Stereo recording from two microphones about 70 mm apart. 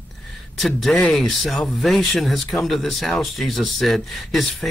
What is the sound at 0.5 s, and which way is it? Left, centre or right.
Speech, centre.